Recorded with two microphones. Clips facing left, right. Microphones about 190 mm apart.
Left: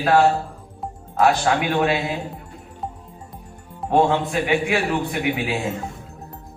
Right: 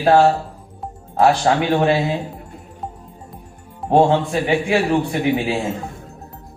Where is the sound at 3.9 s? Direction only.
30° right (ahead or behind).